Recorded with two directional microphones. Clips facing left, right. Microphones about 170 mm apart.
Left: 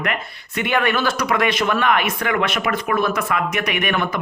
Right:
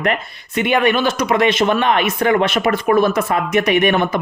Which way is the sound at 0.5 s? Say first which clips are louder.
Right 4 dB; 20° right (ahead or behind).